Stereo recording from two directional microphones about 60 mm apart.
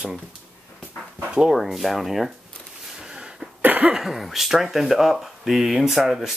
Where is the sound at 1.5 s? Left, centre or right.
Centre.